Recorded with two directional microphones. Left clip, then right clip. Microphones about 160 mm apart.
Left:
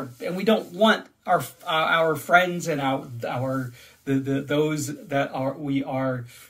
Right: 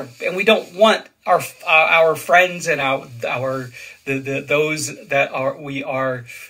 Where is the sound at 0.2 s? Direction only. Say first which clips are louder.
Right 8 dB; 20° left (ahead or behind).